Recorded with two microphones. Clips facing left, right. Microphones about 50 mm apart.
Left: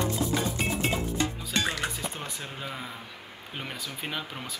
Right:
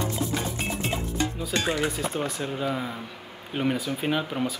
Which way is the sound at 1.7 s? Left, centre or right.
Centre.